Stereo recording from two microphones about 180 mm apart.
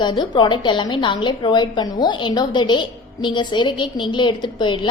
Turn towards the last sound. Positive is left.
turn(degrees=25)  # may be behind; listen again after turning